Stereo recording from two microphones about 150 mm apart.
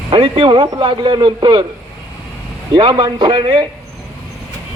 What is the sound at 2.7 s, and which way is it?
Speech, 35° right (ahead or behind).